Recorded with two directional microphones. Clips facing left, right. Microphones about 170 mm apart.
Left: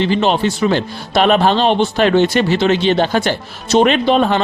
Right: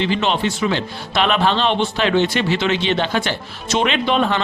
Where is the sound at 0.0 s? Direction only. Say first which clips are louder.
Left 4 dB; 40° left (ahead or behind).